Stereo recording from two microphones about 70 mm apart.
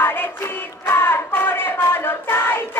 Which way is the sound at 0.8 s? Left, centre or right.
Left.